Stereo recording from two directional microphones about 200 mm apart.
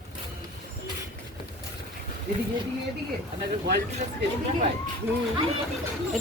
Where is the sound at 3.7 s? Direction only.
55° right (ahead or behind).